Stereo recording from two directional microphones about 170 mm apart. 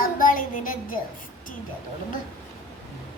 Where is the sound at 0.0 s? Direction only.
55° left (ahead or behind).